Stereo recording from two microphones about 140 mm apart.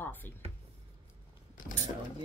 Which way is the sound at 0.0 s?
15° left (ahead or behind).